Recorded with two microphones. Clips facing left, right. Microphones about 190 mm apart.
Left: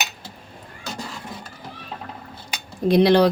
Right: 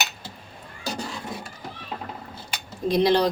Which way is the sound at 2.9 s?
65° left (ahead or behind).